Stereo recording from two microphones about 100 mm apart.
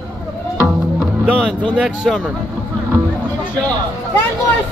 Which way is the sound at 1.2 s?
10° left (ahead or behind).